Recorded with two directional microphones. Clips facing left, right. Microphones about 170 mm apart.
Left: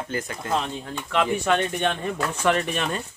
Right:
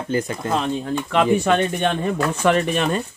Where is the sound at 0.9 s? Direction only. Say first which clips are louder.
Right 4 dB; 45° right (ahead or behind).